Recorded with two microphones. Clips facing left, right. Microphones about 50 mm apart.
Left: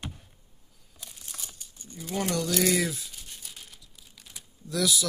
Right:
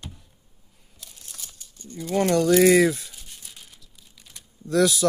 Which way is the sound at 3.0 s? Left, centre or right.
Centre.